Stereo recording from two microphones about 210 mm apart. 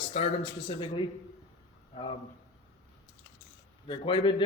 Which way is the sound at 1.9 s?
20° left (ahead or behind).